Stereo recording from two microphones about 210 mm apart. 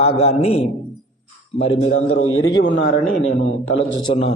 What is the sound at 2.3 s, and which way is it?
A man's voice, 70° left (ahead or behind).